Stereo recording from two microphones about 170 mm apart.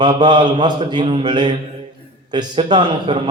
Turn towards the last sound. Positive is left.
turn(degrees=-25)  # may be behind; listen again after turning